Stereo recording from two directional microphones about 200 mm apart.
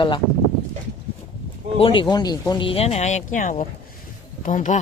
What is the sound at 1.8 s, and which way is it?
Speech, 25° left (ahead or behind).